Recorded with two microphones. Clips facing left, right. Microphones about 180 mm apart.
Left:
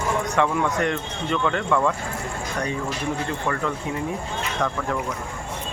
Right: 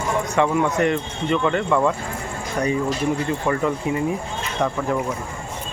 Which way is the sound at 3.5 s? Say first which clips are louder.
Right 6 dB; 10° right (ahead or behind).